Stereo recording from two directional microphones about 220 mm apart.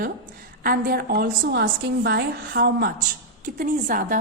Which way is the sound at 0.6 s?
40° right (ahead or behind).